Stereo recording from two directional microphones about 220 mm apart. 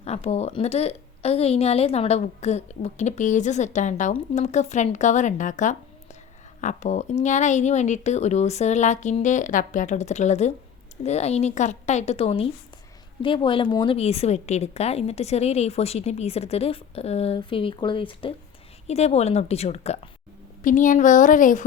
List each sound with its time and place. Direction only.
0.0 s a woman's voice: 30° left (ahead or behind)